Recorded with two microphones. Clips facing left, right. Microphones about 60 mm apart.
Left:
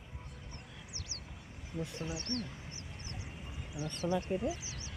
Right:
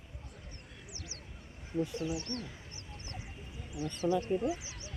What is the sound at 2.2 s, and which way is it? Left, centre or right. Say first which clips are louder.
Speech: left 1 dB; left.